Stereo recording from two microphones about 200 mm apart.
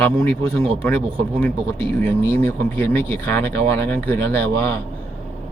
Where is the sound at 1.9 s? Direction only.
10° left (ahead or behind).